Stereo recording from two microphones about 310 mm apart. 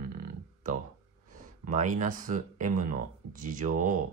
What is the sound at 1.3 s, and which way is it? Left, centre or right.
Speech, right.